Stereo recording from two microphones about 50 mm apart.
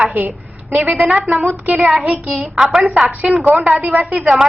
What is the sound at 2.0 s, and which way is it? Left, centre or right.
Child singing, right.